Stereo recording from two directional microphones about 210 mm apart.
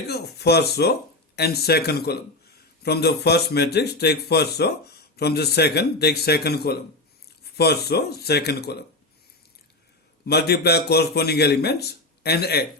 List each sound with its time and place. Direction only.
0.1 s speech: 50° left (ahead or behind)
10.2 s speech: 50° left (ahead or behind)